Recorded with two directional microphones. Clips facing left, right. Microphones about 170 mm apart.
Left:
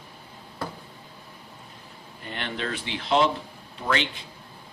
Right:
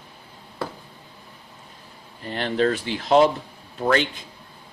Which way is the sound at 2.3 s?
35° right (ahead or behind).